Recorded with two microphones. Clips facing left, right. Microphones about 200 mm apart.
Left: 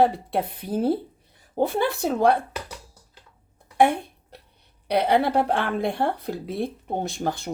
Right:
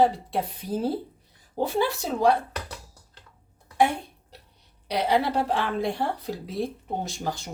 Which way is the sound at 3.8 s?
55° left (ahead or behind).